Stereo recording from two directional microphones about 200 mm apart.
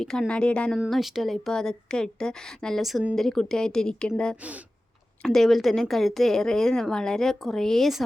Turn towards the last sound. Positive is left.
turn(degrees=0)  # may be behind; listen again after turning